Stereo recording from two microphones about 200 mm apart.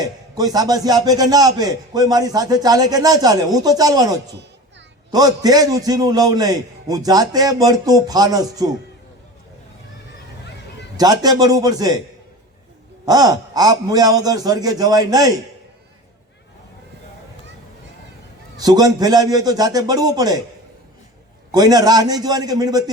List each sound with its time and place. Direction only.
0.0 s a man's voice: 20° right (ahead or behind)
5.1 s a man's voice: 20° right (ahead or behind)
10.9 s a man's voice: 20° right (ahead or behind)
13.1 s a man's voice: 20° right (ahead or behind)
18.5 s a man's voice: 20° right (ahead or behind)
21.5 s a man's voice: 20° right (ahead or behind)